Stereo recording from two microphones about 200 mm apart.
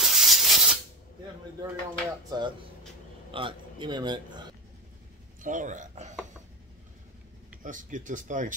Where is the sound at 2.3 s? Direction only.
20° right (ahead or behind).